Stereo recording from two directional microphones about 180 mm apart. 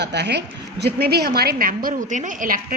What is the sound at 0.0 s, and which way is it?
A woman's voice, 70° right (ahead or behind).